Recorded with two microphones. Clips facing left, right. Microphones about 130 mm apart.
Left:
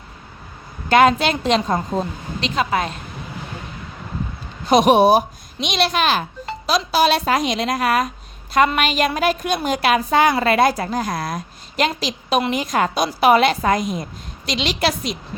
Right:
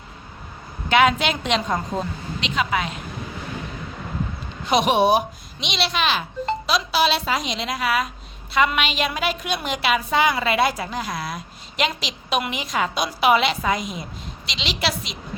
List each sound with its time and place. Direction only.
0.9 s a woman's voice: 40° left (ahead or behind)
4.6 s a woman's voice: 40° left (ahead or behind)